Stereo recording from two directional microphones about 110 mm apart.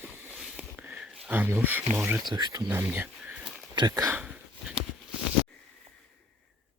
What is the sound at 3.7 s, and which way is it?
Speech, 40° right (ahead or behind).